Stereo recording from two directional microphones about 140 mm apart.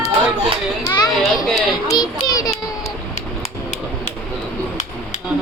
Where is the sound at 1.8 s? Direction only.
25° left (ahead or behind).